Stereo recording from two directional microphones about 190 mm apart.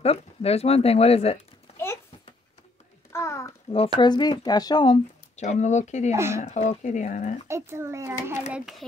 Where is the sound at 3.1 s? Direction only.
15° left (ahead or behind).